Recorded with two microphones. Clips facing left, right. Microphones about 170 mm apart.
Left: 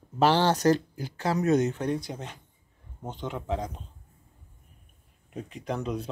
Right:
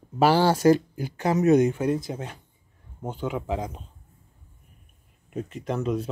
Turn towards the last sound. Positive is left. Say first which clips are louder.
# right 4 dB
turn(degrees=0)  # may be behind; listen again after turning